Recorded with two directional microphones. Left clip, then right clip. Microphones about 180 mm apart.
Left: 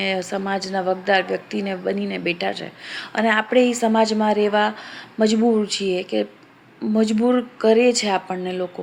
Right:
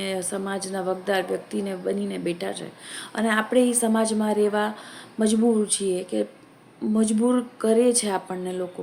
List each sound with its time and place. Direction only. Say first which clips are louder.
0.0 s a woman's voice: left 5 dB; 15° right (ahead or behind)